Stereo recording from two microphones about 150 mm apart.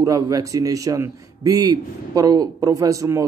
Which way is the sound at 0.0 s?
25° right (ahead or behind).